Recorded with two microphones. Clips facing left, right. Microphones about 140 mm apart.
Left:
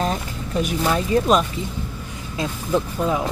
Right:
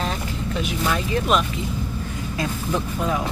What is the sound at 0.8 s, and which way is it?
Speech, 35° left (ahead or behind).